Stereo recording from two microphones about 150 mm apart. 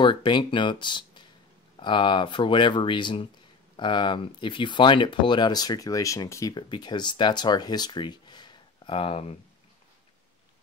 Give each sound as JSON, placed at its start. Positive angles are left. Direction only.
{"t": 0.0, "sound": "speech", "side_deg": 30}